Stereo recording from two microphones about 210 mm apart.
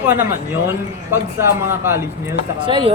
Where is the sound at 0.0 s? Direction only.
10° right (ahead or behind).